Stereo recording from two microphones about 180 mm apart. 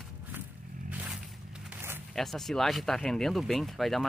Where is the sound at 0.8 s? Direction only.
10° right (ahead or behind).